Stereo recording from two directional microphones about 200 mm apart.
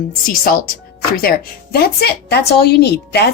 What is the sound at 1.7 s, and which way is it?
A woman's voice, 50° left (ahead or behind).